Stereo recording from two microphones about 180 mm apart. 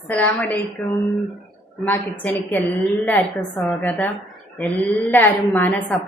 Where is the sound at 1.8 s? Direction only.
10° left (ahead or behind).